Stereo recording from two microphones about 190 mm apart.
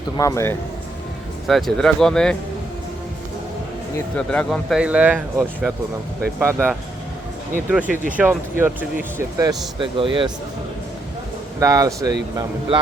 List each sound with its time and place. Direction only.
0.2 s speech: 15° left (ahead or behind)
1.5 s speech: centre (ahead or behind)
3.9 s speech: 5° left (ahead or behind); by 10.1 s 25° right (ahead or behind)
11.6 s speech: 15° right (ahead or behind)